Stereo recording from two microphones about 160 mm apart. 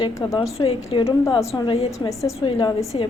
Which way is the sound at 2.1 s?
20° left (ahead or behind).